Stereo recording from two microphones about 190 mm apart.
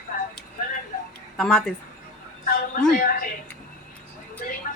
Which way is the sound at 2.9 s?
50° left (ahead or behind).